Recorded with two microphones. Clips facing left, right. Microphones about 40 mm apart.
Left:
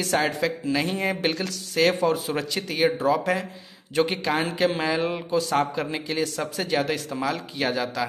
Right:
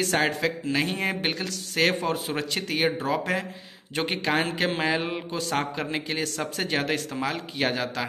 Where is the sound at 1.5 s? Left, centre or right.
Right.